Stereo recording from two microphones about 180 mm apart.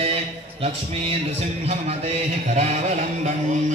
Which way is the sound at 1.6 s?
35° right (ahead or behind).